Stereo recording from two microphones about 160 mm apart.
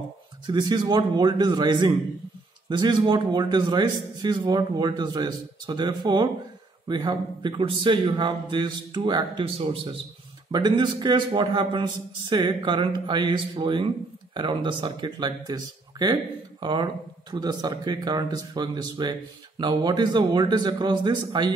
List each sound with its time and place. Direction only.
0.5 s a man's voice: 25° right (ahead or behind)